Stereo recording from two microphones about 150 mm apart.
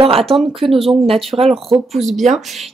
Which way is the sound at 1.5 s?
Centre (ahead or behind).